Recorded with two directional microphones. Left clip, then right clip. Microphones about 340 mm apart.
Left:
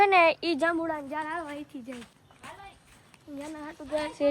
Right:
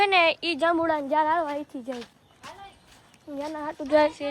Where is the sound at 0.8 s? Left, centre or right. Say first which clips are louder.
Right 8 dB; right.